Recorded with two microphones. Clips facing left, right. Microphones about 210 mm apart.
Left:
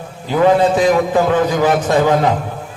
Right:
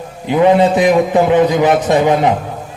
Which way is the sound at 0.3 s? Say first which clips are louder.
Right 2 dB; 20° right (ahead or behind).